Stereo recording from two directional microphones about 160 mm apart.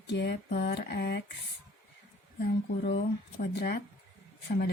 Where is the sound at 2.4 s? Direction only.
85° left.